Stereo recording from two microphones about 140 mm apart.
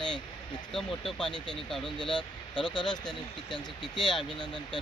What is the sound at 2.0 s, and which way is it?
Speech, 5° left (ahead or behind).